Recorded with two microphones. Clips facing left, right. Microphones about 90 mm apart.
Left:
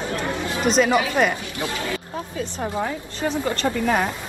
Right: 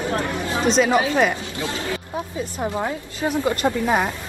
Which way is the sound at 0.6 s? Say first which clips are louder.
Even; centre (ahead or behind).